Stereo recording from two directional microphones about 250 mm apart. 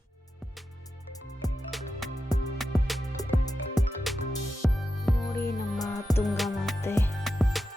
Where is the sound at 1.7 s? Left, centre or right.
Centre.